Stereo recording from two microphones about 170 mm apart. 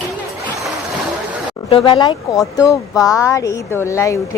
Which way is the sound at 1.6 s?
30° left (ahead or behind).